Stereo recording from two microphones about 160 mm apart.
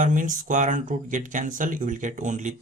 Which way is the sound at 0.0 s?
55° right (ahead or behind).